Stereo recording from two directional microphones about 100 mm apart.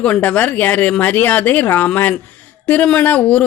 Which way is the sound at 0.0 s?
10° left (ahead or behind).